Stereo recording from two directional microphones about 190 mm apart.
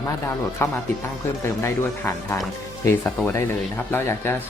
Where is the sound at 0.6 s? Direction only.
10° left (ahead or behind).